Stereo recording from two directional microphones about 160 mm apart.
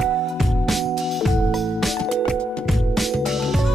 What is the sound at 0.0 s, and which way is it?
Music, centre (ahead or behind).